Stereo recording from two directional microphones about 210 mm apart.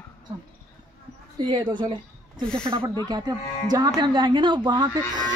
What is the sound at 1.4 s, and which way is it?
A woman's voice, 20° right (ahead or behind).